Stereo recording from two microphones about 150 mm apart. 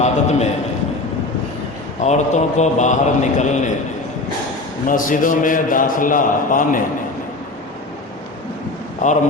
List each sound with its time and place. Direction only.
0.0 s a sound: 50° left (ahead or behind)
2.0 s a man's voice: 50° left (ahead or behind)
4.9 s a man's voice: 65° left (ahead or behind)
9.0 s a man's voice: 55° left (ahead or behind)